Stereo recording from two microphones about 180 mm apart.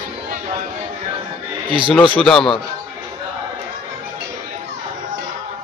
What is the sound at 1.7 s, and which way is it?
Speech, 30° right (ahead or behind).